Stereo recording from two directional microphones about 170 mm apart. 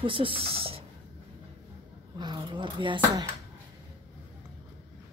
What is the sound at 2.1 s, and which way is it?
Speech, 25° right (ahead or behind).